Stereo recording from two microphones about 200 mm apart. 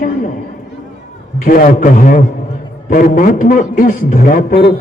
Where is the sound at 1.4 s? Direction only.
45° left (ahead or behind).